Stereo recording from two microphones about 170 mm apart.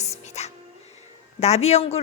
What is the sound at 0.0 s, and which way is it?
Whispering, 40° left (ahead or behind).